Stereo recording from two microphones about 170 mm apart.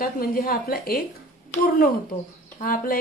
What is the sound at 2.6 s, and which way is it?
Speech, 55° left (ahead or behind).